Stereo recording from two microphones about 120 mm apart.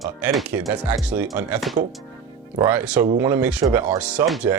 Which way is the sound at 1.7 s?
Centre (ahead or behind).